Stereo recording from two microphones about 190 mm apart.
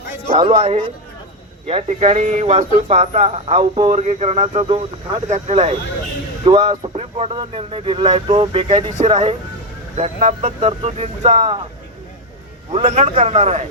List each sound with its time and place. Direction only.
0.3 s speech: 25° right (ahead or behind)
9.9 s speech: 35° right (ahead or behind)
12.7 s speech: 35° right (ahead or behind)